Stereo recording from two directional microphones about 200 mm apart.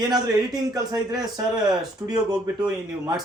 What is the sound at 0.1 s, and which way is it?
Speech, 20° right (ahead or behind).